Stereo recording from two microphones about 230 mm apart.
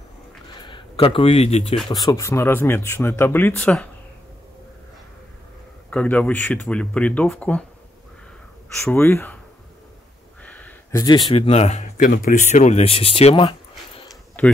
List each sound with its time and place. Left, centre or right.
0.6 s speech: left
1.9 s speech: centre
5.9 s speech: centre
8.7 s speech: centre
10.4 s speech: centre; by 14.0 s left
14.4 s speech: centre